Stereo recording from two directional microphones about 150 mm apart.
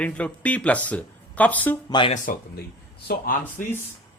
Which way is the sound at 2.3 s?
70° left (ahead or behind).